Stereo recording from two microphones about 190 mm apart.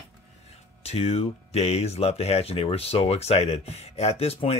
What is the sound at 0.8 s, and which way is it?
Speech, 30° left (ahead or behind).